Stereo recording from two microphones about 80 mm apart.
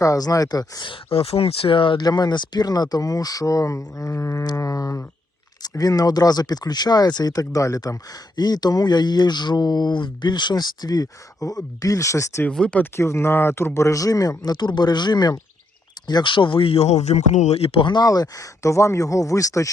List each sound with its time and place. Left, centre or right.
0.0 s speech: left
1.7 s speech: left
8.4 s speech: left
12.5 s speech: centre
13.0 s speech: left
16.0 s speech: left
17.7 s speech: left
18.0 s speech: left